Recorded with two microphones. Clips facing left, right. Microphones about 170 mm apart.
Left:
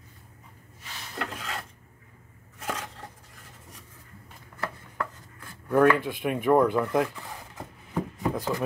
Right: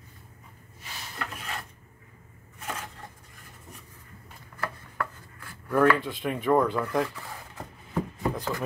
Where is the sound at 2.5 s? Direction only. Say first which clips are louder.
Left 3 dB; 90° left.